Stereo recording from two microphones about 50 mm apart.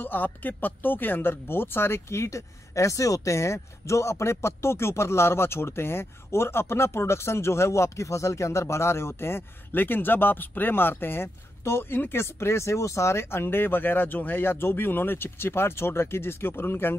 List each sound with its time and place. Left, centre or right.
0.0 s speech: left
9.8 s speech: left